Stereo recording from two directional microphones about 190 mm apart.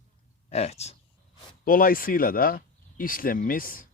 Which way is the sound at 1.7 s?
50° left (ahead or behind).